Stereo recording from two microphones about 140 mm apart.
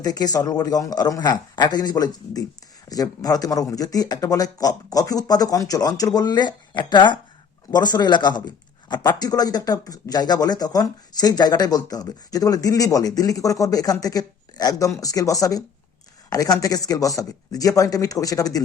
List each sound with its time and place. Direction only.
0.0 s speech: 30° left (ahead or behind)